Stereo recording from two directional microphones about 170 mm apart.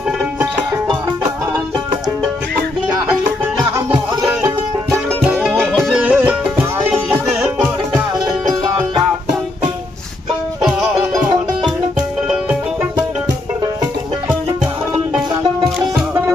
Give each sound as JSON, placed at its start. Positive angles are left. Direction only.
{"t": 4.3, "sound": "music", "side_deg": -15}
{"t": 5.2, "sound": "music", "side_deg": -5}
{"t": 6.0, "sound": "music", "side_deg": -10}
{"t": 10.6, "sound": "music", "side_deg": -5}